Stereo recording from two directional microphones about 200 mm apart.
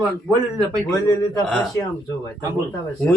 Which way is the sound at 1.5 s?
5° left (ahead or behind).